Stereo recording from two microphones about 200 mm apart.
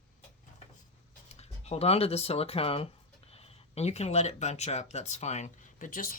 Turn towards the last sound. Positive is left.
turn(degrees=45)  # may be behind; listen again after turning